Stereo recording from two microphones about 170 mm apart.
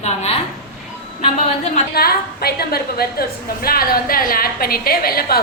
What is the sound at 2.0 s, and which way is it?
A woman's voice, 65° left (ahead or behind).